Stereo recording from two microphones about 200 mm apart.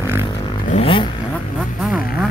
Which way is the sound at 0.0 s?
15° right (ahead or behind).